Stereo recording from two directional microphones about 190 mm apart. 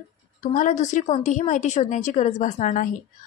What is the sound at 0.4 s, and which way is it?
Speech, 40° left (ahead or behind).